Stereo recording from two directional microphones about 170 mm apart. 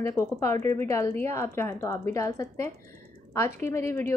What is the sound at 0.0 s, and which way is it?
A woman's voice, 15° left (ahead or behind).